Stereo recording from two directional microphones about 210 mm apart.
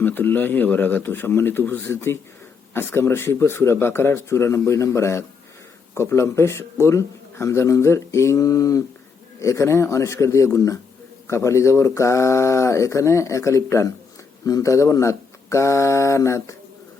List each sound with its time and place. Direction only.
0.0 s speech: 10° left (ahead or behind)